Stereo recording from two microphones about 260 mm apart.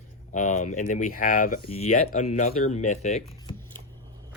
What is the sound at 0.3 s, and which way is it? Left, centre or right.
Speech, left.